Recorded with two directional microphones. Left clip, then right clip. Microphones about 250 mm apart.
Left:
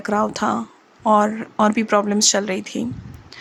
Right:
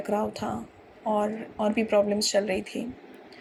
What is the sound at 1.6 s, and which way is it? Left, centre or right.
Speech, left.